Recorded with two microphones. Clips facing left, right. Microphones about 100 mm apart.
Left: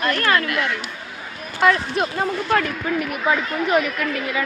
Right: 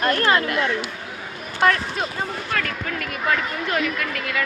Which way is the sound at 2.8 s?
15° left (ahead or behind).